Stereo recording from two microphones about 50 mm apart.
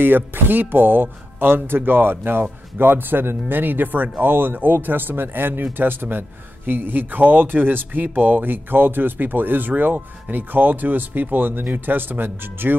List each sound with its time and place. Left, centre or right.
0.0 s a man's voice: right